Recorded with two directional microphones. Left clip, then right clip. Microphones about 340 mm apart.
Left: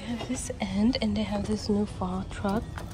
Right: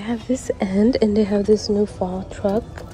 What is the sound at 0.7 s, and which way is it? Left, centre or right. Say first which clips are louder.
A woman's voice: right 10 dB; centre.